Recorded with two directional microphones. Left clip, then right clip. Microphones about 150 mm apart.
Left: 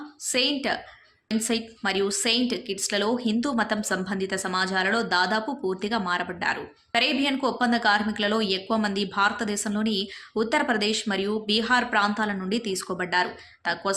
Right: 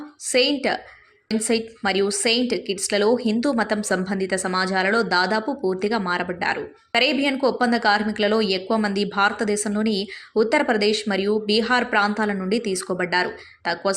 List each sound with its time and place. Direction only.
0.3 s a woman's voice: 20° right (ahead or behind)